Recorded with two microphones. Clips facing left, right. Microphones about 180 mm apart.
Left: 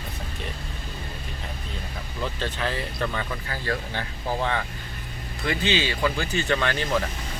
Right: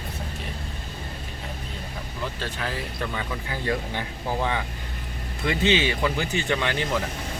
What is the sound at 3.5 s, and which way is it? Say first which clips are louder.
Speech: right 2 dB; 20° right (ahead or behind).